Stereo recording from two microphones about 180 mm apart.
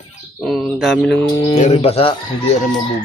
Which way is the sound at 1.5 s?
35° left (ahead or behind).